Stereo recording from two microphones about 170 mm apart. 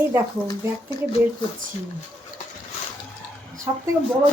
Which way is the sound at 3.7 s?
20° right (ahead or behind).